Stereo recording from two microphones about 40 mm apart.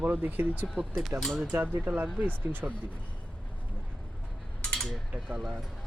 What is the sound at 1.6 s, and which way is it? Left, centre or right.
Speech, right.